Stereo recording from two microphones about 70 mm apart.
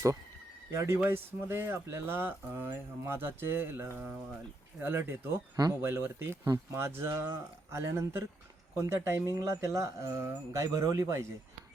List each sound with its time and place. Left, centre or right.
0.7 s speech: right
0.9 s speech: right